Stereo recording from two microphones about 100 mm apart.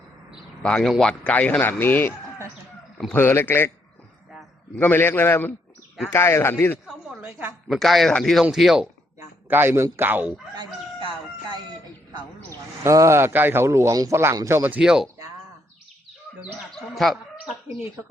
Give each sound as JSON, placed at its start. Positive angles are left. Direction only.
{"t": 0.6, "sound": "a man's voice", "side_deg": 5}
{"t": 4.8, "sound": "a man's voice", "side_deg": 20}
{"t": 6.8, "sound": "a sound", "side_deg": -5}
{"t": 7.7, "sound": "speech", "side_deg": 0}
{"t": 9.5, "sound": "a man's voice", "side_deg": -20}
{"t": 12.8, "sound": "a man's voice", "side_deg": -30}
{"t": 14.8, "sound": "speech", "side_deg": -5}
{"t": 16.9, "sound": "speech", "side_deg": 0}